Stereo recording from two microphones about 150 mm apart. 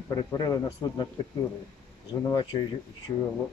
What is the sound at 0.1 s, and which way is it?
Speech, 25° left (ahead or behind).